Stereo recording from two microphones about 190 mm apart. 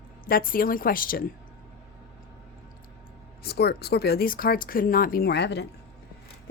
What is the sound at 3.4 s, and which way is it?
Speech, 55° left (ahead or behind).